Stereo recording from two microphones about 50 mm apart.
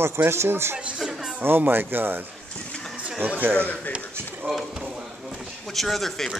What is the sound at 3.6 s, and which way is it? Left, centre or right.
Speech, left.